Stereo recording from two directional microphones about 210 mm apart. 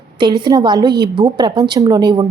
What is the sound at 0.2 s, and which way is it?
A woman's voice, 20° right (ahead or behind).